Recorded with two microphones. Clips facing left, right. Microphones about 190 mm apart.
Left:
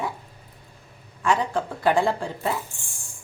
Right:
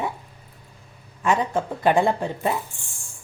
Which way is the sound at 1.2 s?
20° right (ahead or behind).